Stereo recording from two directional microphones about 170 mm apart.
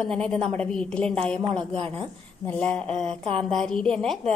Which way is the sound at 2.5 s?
5° left (ahead or behind).